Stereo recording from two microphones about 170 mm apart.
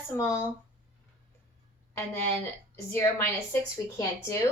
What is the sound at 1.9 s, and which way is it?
Speech, 15° left (ahead or behind).